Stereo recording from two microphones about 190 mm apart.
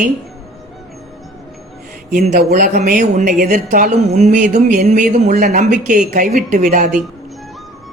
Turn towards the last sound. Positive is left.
turn(degrees=-40)  # may be behind; listen again after turning